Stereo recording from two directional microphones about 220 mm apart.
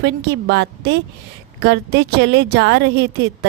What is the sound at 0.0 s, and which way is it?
A woman's voice, 50° right (ahead or behind).